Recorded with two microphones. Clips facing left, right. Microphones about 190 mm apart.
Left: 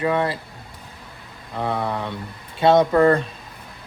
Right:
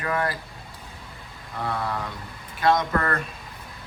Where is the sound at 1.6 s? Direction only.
20° left (ahead or behind).